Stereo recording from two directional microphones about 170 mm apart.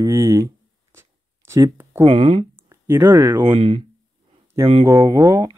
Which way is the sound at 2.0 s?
30° right (ahead or behind).